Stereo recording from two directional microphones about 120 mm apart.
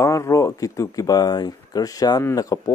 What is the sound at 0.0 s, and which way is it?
A man's voice, 25° left (ahead or behind).